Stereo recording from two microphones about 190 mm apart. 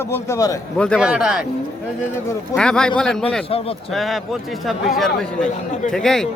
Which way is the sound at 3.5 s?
30° left (ahead or behind).